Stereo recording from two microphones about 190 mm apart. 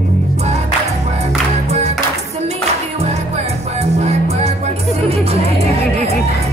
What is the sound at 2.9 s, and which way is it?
Music, 35° right (ahead or behind).